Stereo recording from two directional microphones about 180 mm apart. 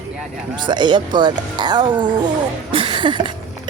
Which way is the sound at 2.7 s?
30° right (ahead or behind).